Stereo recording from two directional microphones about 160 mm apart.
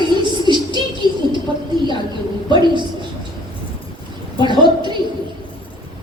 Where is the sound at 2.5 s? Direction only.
30° right (ahead or behind).